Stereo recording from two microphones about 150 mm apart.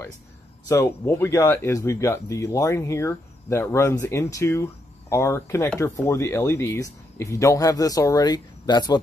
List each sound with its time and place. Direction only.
0.7 s speech: 20° left (ahead or behind)